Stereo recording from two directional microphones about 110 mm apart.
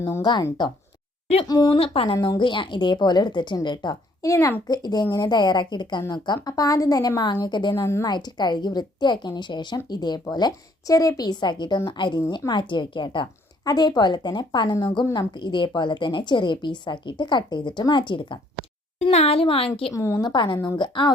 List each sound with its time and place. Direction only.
0.2 s a woman's voice: 40° left (ahead or behind)
1.5 s a woman's voice: 35° left (ahead or behind)
1.7 s a woman's voice: 55° left (ahead or behind)
4.2 s a woman's voice: 30° left (ahead or behind); by 18.3 s 45° left (ahead or behind)
19.1 s a woman's voice: 65° left (ahead or behind)
19.9 s a woman's voice: 25° left (ahead or behind)
20.2 s a woman's voice: 45° left (ahead or behind)